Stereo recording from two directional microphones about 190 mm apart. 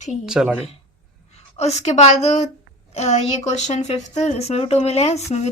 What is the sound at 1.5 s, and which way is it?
Speech, 35° left (ahead or behind).